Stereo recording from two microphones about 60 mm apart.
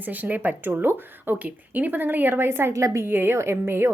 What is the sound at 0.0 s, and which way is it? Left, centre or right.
Speech, right.